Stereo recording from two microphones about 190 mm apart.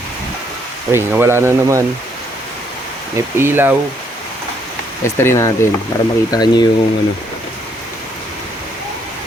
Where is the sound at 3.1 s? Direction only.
10° right (ahead or behind).